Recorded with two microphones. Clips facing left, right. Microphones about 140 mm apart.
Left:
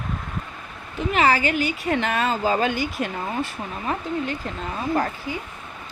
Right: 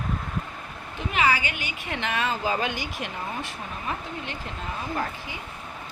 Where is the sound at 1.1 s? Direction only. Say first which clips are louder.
Left 5 dB; 40° left (ahead or behind).